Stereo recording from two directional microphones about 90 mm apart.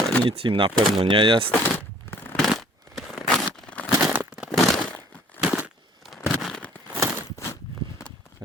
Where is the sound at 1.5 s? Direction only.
25° left (ahead or behind).